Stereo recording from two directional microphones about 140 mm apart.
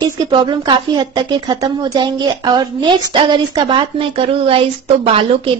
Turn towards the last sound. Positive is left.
turn(degrees=-40)  # may be behind; listen again after turning